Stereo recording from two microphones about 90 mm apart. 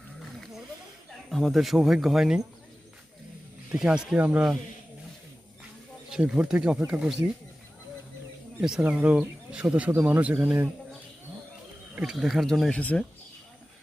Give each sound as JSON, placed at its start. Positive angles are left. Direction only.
{"t": 1.3, "sound": "speech", "side_deg": 5}
{"t": 3.7, "sound": "speech", "side_deg": -10}
{"t": 6.1, "sound": "speech", "side_deg": -10}
{"t": 8.8, "sound": "speech", "side_deg": -15}
{"t": 12.1, "sound": "speech", "side_deg": 0}
{"t": 12.8, "sound": "speech", "side_deg": 15}